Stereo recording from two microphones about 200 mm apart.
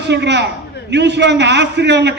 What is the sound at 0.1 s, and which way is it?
A man's voice, 60° right (ahead or behind).